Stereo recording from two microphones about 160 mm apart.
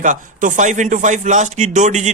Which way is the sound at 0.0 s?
50° right (ahead or behind).